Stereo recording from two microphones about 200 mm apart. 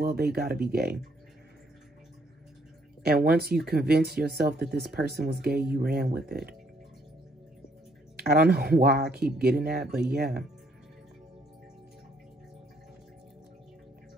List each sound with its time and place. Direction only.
0.0 s speech: 50° right (ahead or behind)
3.0 s speech: 50° right (ahead or behind)
8.2 s speech: 50° right (ahead or behind)